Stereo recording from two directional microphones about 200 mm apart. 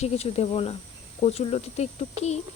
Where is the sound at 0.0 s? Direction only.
30° left (ahead or behind).